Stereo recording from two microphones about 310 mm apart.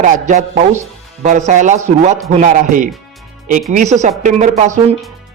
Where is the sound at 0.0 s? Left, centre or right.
Right.